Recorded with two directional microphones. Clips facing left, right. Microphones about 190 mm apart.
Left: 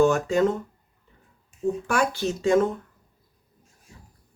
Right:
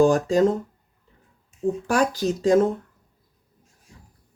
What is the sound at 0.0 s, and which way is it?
Speech, 35° right (ahead or behind).